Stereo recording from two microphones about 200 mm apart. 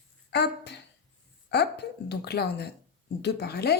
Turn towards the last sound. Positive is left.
turn(degrees=55)  # may be behind; listen again after turning